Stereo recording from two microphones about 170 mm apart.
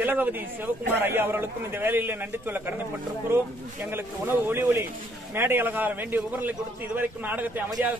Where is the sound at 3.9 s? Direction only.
15° right (ahead or behind).